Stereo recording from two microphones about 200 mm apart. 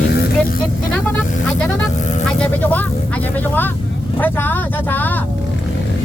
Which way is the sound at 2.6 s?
10° left (ahead or behind).